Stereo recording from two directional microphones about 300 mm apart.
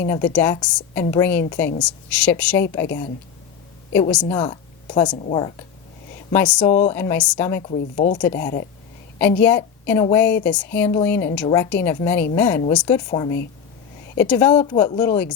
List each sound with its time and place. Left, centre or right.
0.3 s a woman's voice: centre
3.9 s a woman's voice: centre
6.3 s a woman's voice: centre
7.6 s speech: left
8.2 s a woman's voice: centre
13.1 s a woman's voice: centre